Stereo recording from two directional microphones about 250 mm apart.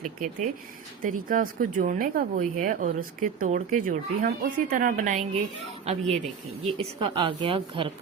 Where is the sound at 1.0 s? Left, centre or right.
Right.